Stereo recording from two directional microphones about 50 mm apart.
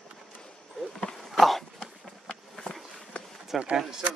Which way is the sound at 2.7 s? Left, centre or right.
Centre.